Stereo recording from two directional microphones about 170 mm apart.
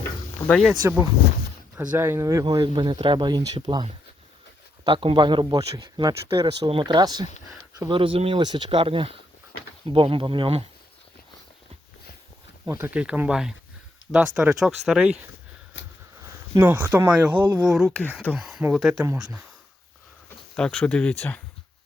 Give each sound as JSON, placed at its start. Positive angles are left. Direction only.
{"t": 0.3, "sound": "speech", "side_deg": 10}
{"t": 0.8, "sound": "speech", "side_deg": -15}
{"t": 12.8, "sound": "speech", "side_deg": -5}
{"t": 16.6, "sound": "speech", "side_deg": -10}
{"t": 20.6, "sound": "speech", "side_deg": 5}